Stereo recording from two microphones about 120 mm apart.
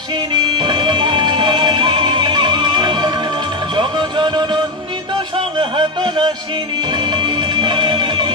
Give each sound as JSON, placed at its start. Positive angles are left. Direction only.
{"t": 0.3, "sound": "music", "side_deg": -40}
{"t": 5.6, "sound": "music", "side_deg": -45}